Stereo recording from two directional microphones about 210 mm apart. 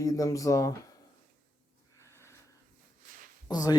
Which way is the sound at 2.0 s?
10° left (ahead or behind).